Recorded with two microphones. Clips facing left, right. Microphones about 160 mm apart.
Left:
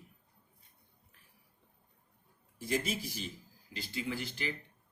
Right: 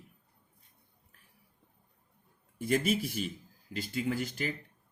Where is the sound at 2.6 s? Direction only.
60° right (ahead or behind).